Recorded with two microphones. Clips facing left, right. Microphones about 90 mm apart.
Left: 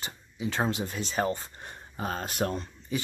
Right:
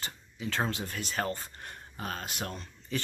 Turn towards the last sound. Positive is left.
turn(degrees=15)  # may be behind; listen again after turning